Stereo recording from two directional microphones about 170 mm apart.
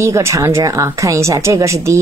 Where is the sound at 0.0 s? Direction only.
15° right (ahead or behind).